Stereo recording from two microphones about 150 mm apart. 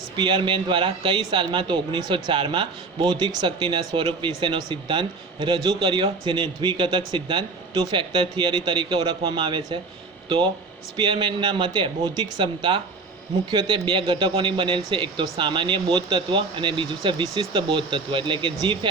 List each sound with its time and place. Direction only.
0.2 s a man's voice: 30° right (ahead or behind)